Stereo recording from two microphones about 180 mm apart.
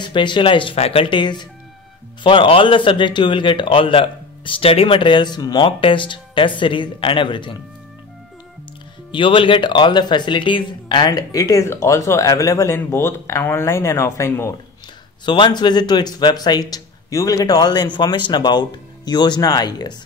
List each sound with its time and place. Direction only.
0.0 s a man's voice: 25° left (ahead or behind)
9.1 s speech: 30° left (ahead or behind)
15.2 s a man's voice: 25° left (ahead or behind)